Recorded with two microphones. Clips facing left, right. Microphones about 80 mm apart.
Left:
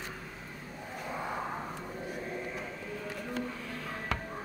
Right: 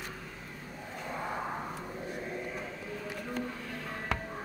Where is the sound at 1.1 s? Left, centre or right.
Centre.